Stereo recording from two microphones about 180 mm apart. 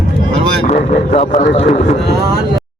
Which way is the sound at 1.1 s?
40° left (ahead or behind).